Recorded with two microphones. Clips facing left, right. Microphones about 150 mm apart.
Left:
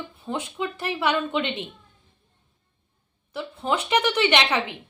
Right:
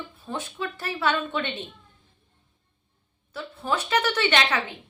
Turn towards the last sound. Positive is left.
turn(degrees=15)  # may be behind; listen again after turning